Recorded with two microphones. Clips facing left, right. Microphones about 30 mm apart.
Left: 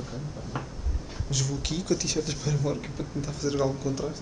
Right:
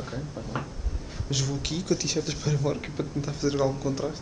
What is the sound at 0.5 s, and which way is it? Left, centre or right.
Speech, centre.